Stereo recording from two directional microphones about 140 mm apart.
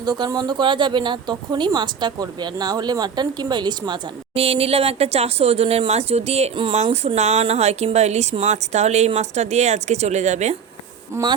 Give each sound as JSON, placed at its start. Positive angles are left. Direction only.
{"t": 0.0, "sound": "speech", "side_deg": -25}
{"t": 4.4, "sound": "speech", "side_deg": -45}
{"t": 11.1, "sound": "speech", "side_deg": -30}